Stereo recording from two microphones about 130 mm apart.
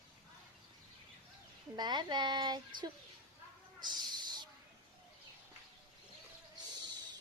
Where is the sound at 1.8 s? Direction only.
35° right (ahead or behind).